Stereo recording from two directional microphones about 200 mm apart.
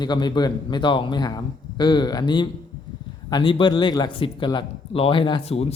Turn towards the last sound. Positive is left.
turn(degrees=30)  # may be behind; listen again after turning